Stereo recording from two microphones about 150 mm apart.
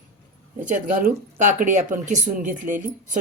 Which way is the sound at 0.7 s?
55° right (ahead or behind).